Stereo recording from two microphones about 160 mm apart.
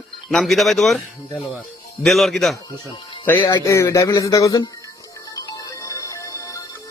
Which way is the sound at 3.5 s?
20° left (ahead or behind).